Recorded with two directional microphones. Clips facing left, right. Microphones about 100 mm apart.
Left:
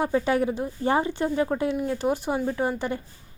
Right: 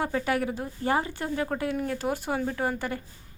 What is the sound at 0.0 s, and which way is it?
A woman's voice, 25° left (ahead or behind).